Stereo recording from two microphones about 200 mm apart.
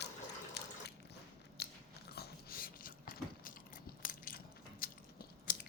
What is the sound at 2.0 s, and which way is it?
Gears, 55° left (ahead or behind).